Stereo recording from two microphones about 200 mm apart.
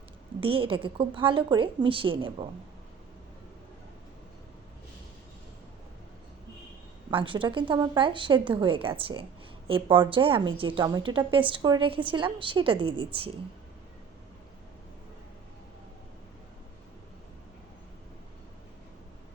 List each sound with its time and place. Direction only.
0.3 s a woman's voice: 25° right (ahead or behind)
7.1 s a woman's voice: 25° right (ahead or behind)